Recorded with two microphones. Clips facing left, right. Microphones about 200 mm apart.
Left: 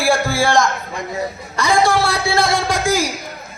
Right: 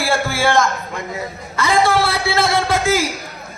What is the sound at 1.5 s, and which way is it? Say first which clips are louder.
A man's voice: even; 15° left (ahead or behind).